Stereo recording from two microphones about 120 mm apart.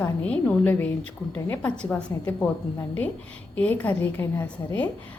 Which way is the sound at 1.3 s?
25° left (ahead or behind).